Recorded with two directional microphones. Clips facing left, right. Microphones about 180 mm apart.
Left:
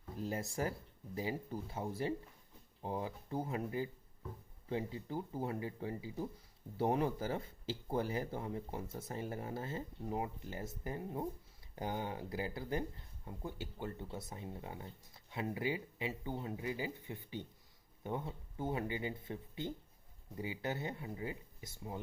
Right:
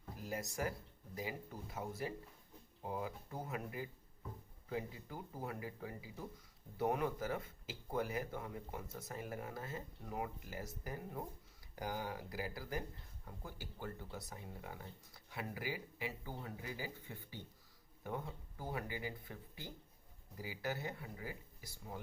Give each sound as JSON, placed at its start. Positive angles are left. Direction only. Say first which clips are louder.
{"t": 0.2, "sound": "speech", "louder": "left 3 dB", "side_deg": 30}